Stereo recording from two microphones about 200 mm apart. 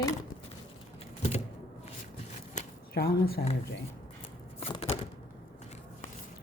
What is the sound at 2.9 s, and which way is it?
Speech, 50° left (ahead or behind).